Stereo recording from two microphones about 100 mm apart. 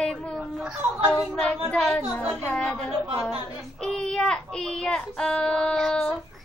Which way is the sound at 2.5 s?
5° left (ahead or behind).